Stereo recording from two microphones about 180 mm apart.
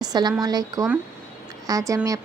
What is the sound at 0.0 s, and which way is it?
A woman's voice, 20° right (ahead or behind).